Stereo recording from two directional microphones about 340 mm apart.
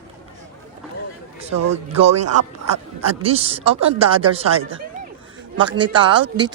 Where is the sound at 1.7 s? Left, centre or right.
Centre.